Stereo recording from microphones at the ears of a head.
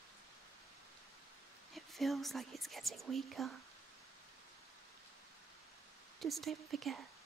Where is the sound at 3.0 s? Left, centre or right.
Right.